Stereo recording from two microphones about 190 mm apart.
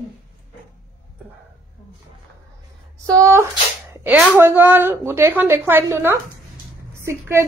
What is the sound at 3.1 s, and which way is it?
A woman's voice, 15° right (ahead or behind).